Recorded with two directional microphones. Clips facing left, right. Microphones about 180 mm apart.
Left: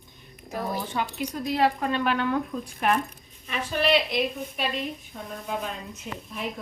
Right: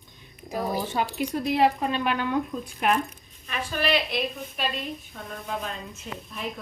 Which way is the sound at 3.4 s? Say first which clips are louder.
Left 2 dB; 20° left (ahead or behind).